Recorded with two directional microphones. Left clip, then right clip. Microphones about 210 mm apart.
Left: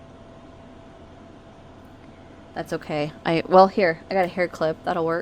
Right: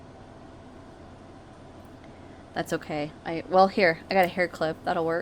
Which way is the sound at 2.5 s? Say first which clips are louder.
Even; centre (ahead or behind).